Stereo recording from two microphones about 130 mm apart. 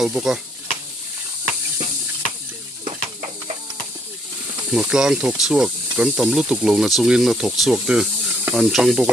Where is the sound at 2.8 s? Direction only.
55° right (ahead or behind).